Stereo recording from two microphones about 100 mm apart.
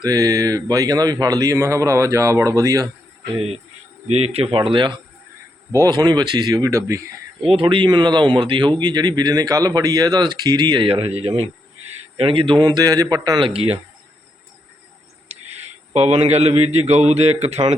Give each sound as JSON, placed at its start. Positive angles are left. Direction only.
{"t": 0.0, "sound": "speech", "side_deg": -40}
{"t": 3.3, "sound": "speech", "side_deg": -90}
{"t": 4.5, "sound": "speech", "side_deg": -60}
{"t": 5.7, "sound": "speech", "side_deg": -35}
{"t": 7.5, "sound": "speech", "side_deg": -55}
{"t": 8.8, "sound": "speech", "side_deg": -45}
{"t": 10.8, "sound": "speech", "side_deg": -65}
{"t": 12.1, "sound": "speech", "side_deg": -65}
{"t": 13.4, "sound": "speech", "side_deg": -80}
{"t": 15.3, "sound": "a man's voice", "side_deg": -90}